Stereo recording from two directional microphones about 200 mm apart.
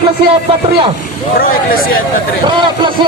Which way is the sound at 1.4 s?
45° left (ahead or behind).